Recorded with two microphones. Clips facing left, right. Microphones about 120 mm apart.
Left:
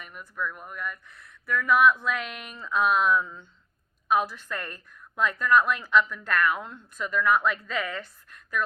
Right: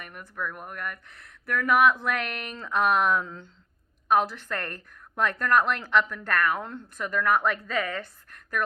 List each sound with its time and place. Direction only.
0.0 s a woman's voice: 55° right (ahead or behind); by 3.4 s 75° right (ahead or behind)
4.1 s a woman's voice: 65° right (ahead or behind)